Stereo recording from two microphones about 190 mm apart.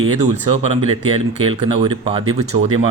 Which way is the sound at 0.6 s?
30° right (ahead or behind).